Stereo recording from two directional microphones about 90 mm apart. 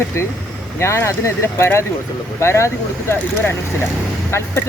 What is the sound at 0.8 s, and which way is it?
Speech, 30° left (ahead or behind).